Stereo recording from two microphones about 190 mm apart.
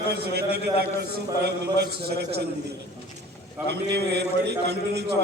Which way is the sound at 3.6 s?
60° right (ahead or behind).